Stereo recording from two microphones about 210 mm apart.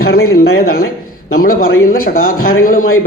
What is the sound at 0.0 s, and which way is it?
Speech, 45° left (ahead or behind).